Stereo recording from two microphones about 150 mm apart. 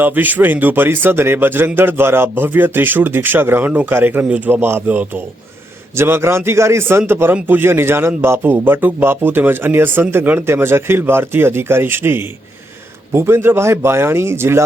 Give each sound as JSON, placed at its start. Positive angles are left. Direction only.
{"t": 0.0, "sound": "speech", "side_deg": -10}